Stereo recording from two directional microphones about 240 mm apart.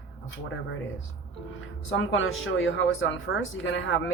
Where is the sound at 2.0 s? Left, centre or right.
Left.